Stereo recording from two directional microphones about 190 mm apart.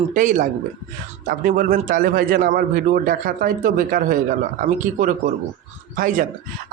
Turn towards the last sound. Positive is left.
turn(degrees=-45)  # may be behind; listen again after turning